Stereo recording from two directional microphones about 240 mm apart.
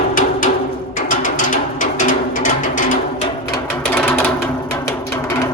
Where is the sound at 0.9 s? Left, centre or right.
Left.